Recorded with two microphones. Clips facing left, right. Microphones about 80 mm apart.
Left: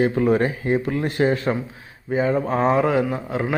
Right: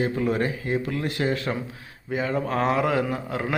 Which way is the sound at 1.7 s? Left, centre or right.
Centre.